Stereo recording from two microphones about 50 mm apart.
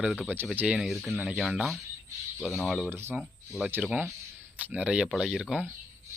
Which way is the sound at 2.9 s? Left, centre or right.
Right.